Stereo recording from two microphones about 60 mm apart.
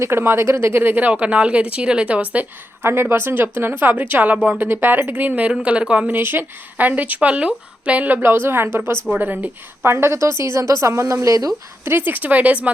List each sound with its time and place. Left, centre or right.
0.0 s speech: right
1.1 s speech: centre
2.8 s speech: right; by 6.1 s centre
6.1 s speech: right
8.2 s a woman's voice: right
11.9 s speech: right